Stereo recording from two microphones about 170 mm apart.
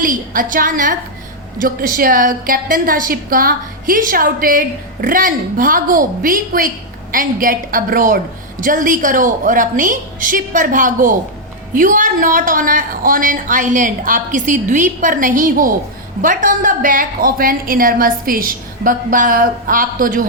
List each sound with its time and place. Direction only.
0.0 s a woman's voice: 50° right (ahead or behind)